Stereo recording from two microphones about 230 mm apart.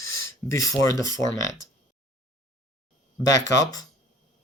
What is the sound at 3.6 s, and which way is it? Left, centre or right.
Speech, centre.